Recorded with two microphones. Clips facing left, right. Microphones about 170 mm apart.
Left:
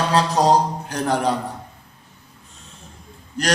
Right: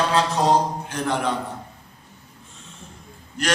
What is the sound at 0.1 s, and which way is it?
A man's voice, 35° left (ahead or behind).